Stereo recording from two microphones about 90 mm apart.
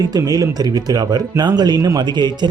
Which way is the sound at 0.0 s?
45° right (ahead or behind).